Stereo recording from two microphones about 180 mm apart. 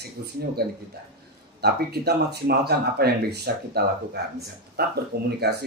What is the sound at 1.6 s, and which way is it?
Speech, 65° right (ahead or behind).